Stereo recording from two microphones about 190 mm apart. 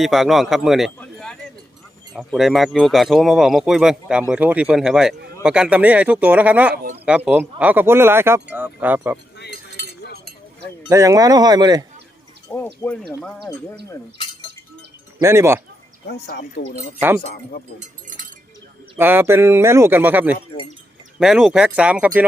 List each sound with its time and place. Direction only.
0.0 s speech: centre (ahead or behind)
0.9 s a sound: 5° left (ahead or behind)
2.1 s speech: centre (ahead or behind)
10.8 s speech: 15° right (ahead or behind)
12.5 s speech: 10° left (ahead or behind)
13.9 s chink: 25° left (ahead or behind)
15.2 s speech: 15° right (ahead or behind)
16.0 s speech: 60° left (ahead or behind)
17.7 s chink: 45° right (ahead or behind)
18.9 s speech: 10° right (ahead or behind)